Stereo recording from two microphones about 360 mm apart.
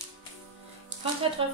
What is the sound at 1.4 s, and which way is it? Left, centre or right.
Speech, centre.